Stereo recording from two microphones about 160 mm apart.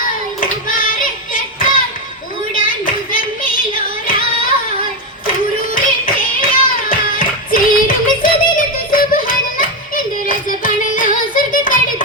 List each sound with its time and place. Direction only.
0.7 s child singing: 60° left (ahead or behind)
2.6 s music: 60° left (ahead or behind)
6.4 s music: 60° left (ahead or behind)